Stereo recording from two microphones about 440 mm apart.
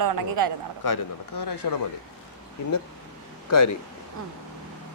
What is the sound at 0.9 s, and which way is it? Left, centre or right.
Speech, left.